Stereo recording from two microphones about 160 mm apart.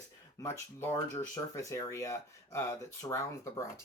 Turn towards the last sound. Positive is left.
turn(degrees=20)  # may be behind; listen again after turning